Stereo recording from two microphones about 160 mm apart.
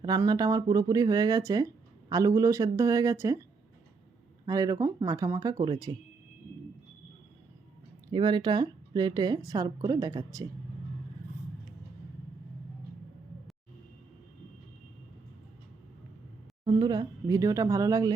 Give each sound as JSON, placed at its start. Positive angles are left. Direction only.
{"t": 0.0, "sound": "speech", "side_deg": -25}
{"t": 4.4, "sound": "speech", "side_deg": -20}
{"t": 8.1, "sound": "speech", "side_deg": -30}
{"t": 16.6, "sound": "speech", "side_deg": -25}